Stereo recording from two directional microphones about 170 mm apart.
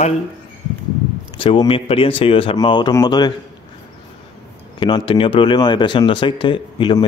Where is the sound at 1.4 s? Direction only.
30° left (ahead or behind).